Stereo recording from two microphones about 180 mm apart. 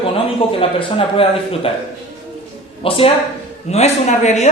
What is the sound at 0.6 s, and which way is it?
Speech, 30° left (ahead or behind).